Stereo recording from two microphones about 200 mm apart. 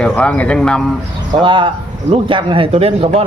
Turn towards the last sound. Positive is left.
turn(degrees=-30)  # may be behind; listen again after turning